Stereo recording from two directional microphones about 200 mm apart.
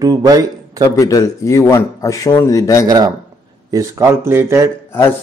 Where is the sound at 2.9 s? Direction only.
20° right (ahead or behind).